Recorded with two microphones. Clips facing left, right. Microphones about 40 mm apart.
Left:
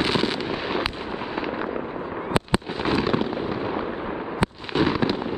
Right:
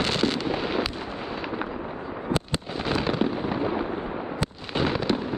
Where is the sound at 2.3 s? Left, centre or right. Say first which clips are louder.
Left 5 dB; left.